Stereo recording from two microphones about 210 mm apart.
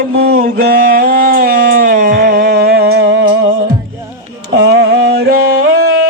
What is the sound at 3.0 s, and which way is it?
Music, 65° right (ahead or behind).